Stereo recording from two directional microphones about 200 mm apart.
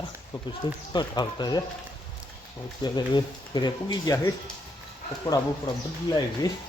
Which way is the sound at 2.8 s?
20° left (ahead or behind).